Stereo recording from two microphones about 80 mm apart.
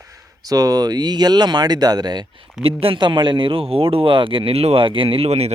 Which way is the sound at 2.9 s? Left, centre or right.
Right.